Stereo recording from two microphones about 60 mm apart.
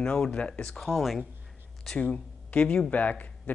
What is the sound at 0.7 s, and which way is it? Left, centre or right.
Speech, centre.